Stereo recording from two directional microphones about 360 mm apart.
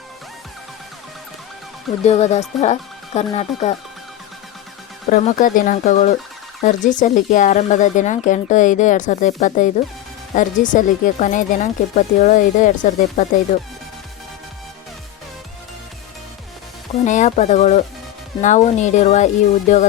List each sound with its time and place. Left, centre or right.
2.0 s speech: centre
5.2 s speech: left
17.1 s speech: centre